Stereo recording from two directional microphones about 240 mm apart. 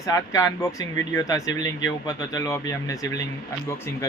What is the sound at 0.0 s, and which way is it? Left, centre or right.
Speech, centre.